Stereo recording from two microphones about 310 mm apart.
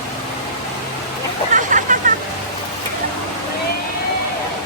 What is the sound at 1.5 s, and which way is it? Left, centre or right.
Hubbub, right.